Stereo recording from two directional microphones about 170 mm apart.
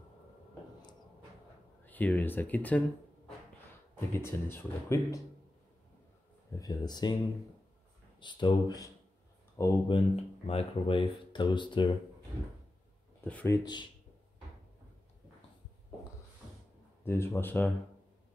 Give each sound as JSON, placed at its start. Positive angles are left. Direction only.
{"t": 1.9, "sound": "speech", "side_deg": 10}
{"t": 3.9, "sound": "speech", "side_deg": 15}
{"t": 6.6, "sound": "speech", "side_deg": 25}
{"t": 8.2, "sound": "speech", "side_deg": 25}
{"t": 13.2, "sound": "speech", "side_deg": 10}
{"t": 17.0, "sound": "speech", "side_deg": 15}